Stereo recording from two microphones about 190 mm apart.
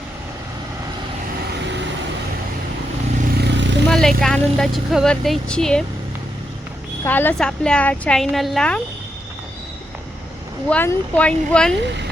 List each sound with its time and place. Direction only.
3.4 s vehicle: 70° right (ahead or behind)
3.8 s speech: centre (ahead or behind)
7.0 s speech: 10° left (ahead or behind)
10.7 s speech: 10° left (ahead or behind)